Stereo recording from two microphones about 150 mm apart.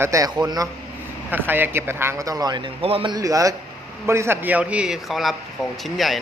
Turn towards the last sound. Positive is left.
turn(degrees=0)  # may be behind; listen again after turning